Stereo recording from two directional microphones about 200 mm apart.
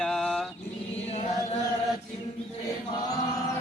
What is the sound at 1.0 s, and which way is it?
Chant, 35° left (ahead or behind).